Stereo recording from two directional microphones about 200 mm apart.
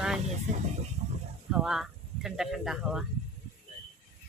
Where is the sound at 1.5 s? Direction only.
5° right (ahead or behind).